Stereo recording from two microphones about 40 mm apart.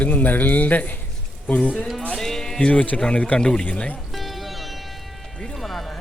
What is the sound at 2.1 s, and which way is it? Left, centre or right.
Speech, centre.